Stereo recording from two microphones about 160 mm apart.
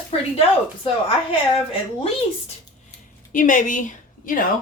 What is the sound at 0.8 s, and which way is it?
Speech, 35° left (ahead or behind).